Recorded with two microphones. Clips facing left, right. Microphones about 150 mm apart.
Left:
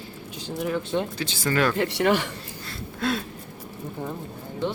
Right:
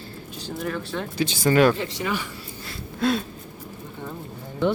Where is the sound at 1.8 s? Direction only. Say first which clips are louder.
Left 6 dB; 70° left (ahead or behind).